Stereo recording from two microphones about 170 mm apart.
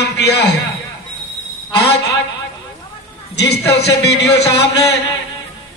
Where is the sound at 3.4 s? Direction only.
80° left.